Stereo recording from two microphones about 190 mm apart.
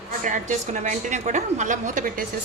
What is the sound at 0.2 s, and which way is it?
A woman's voice, 45° right (ahead or behind).